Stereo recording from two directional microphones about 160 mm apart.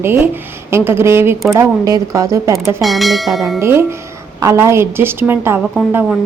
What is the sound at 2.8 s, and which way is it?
Speech, centre (ahead or behind).